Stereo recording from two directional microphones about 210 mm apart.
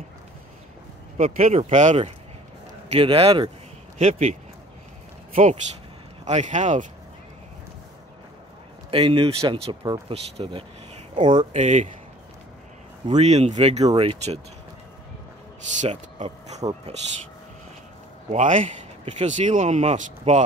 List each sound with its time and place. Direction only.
1.1 s speech: 30° right (ahead or behind)
8.9 s speech: 25° right (ahead or behind)
11.5 s speech: 35° right (ahead or behind)
13.0 s speech: 30° right (ahead or behind)
15.8 s speech: 30° right (ahead or behind)
18.3 s speech: 35° right (ahead or behind)